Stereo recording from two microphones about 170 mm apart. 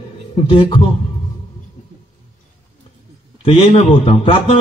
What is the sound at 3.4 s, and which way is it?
A man's voice, 30° left (ahead or behind).